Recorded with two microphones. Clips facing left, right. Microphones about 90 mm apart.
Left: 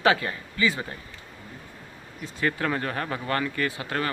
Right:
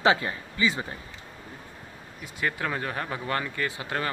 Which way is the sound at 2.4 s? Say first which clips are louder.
Left 3 dB; 10° right (ahead or behind).